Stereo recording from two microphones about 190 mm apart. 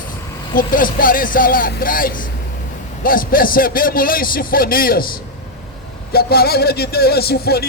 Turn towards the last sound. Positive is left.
turn(degrees=55)  # may be behind; listen again after turning